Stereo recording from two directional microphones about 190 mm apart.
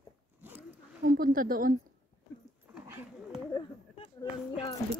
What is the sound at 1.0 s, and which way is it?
Speech, 50° right (ahead or behind).